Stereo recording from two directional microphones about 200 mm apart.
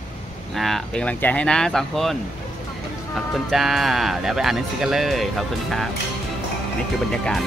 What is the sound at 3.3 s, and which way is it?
Speech, centre (ahead or behind).